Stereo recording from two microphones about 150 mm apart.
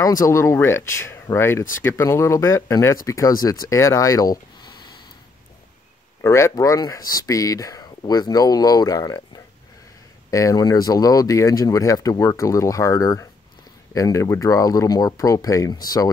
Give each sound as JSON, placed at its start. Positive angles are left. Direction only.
{"t": 0.0, "sound": "speech", "side_deg": 20}
{"t": 6.2, "sound": "speech", "side_deg": 20}